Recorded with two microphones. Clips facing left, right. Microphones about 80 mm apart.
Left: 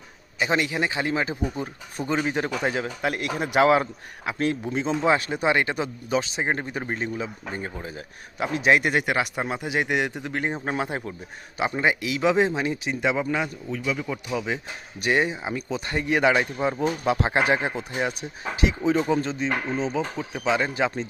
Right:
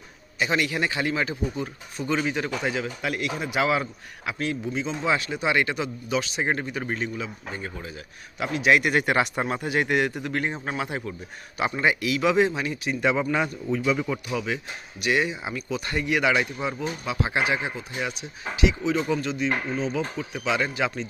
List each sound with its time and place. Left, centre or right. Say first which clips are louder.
0.3 s speech: left 1 dB; left
6.4 s speech: even; centre
9.0 s speech: right 2 dB; centre
10.7 s speech: left 2 dB; left; by 13.5 s centre
13.7 s speech: right 4 dB; centre
14.3 s speech: left 1 dB; left
15.0 s speech: left 1 dB; left
17.1 s speech: left 3 dB; left